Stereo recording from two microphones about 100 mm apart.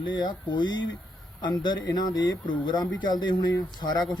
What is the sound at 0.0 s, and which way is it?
Speech, 50° left (ahead or behind).